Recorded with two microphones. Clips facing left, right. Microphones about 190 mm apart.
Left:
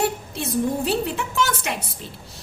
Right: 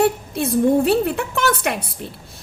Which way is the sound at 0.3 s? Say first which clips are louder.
Right 8 dB; 55° right (ahead or behind).